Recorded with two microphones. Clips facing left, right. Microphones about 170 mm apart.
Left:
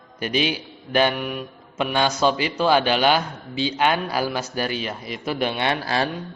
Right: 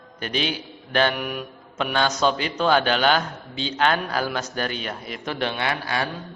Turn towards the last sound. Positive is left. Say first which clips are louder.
# left 3 dB
turn(degrees=30)  # may be behind; listen again after turning